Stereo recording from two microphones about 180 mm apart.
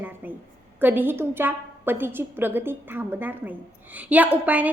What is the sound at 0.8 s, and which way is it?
A woman's voice, 10° right (ahead or behind).